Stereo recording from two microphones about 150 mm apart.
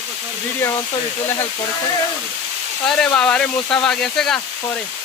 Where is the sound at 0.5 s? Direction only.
20° left (ahead or behind).